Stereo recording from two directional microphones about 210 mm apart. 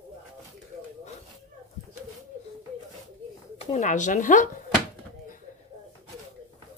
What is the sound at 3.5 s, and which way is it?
Speech, 35° left (ahead or behind).